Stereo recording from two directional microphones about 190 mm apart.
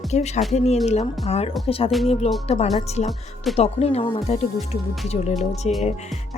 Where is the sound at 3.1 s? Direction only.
Centre (ahead or behind).